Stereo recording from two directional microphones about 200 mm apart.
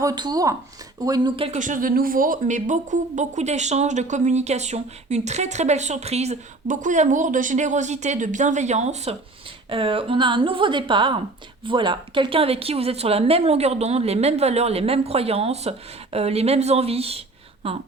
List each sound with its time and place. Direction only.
0.0 s speech: 20° right (ahead or behind)
1.5 s a woman's voice: 40° right (ahead or behind)